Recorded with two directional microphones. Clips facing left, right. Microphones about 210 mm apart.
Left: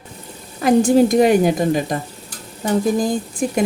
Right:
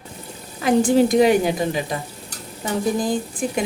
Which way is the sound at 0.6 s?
40° left (ahead or behind).